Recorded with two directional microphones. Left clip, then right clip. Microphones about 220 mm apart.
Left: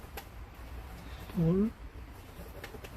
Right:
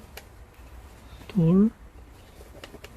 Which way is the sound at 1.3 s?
50° right (ahead or behind).